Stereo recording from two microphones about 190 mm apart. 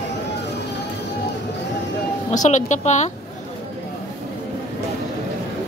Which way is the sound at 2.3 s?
40° left (ahead or behind).